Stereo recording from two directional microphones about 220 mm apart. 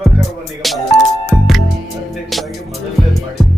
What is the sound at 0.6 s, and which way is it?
Music, centre (ahead or behind).